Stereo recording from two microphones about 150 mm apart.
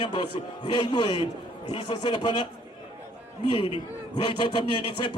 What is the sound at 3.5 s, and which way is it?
Speech, 35° left (ahead or behind).